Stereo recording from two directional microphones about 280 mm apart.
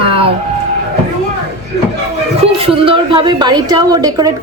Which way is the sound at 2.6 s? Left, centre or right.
Centre.